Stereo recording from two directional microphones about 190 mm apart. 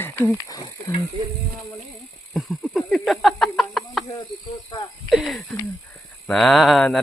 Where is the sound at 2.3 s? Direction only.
Centre (ahead or behind).